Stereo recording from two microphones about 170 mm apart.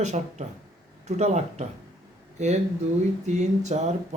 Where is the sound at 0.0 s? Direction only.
45° right (ahead or behind).